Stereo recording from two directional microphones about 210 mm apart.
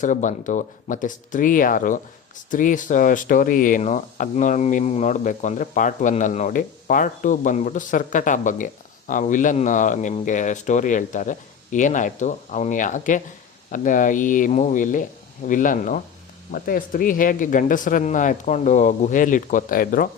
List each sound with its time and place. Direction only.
0.0 s speech: 35° left (ahead or behind)